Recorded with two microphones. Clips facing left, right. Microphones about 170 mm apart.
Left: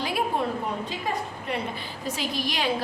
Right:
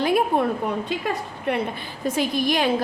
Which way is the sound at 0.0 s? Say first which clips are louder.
Right 7 dB; 55° right (ahead or behind).